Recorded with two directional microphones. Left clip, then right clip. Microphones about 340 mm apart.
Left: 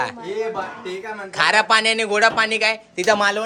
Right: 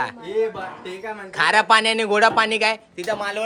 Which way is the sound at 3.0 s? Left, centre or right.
Left.